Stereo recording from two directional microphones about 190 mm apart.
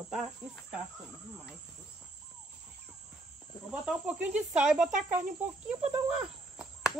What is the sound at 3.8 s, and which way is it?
Speech, 5° right (ahead or behind).